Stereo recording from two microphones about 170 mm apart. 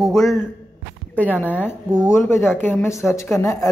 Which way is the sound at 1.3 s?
10° left (ahead or behind).